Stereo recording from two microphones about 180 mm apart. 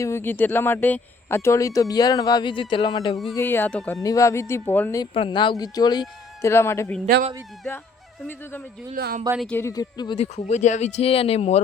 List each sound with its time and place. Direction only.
0.0 s speech: 15° left (ahead or behind)
3.3 s speech: 10° left (ahead or behind)
4.0 s speech: 20° left (ahead or behind)
5.1 s speech: 30° left (ahead or behind)
9.0 s speech: 60° right (ahead or behind)
9.4 s speech: 10° left (ahead or behind)
10.2 s speech: 40° left (ahead or behind)